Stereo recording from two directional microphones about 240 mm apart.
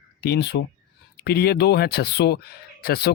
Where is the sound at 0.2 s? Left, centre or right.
Left.